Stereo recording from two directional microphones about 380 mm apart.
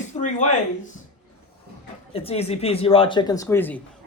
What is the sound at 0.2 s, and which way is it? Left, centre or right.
Speech, centre.